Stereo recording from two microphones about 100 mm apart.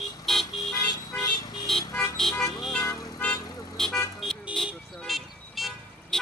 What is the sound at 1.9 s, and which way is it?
Vehicle, 30° left (ahead or behind).